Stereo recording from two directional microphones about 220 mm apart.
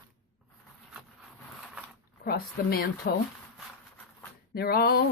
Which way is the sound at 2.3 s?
45° left (ahead or behind).